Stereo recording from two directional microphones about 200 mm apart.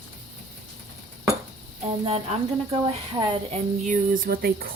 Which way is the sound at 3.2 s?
25° right (ahead or behind).